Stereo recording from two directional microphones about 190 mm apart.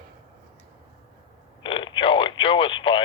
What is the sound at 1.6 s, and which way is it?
Radio, 25° left (ahead or behind).